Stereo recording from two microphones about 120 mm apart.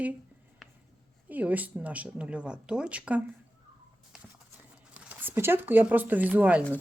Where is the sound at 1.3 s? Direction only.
15° right (ahead or behind).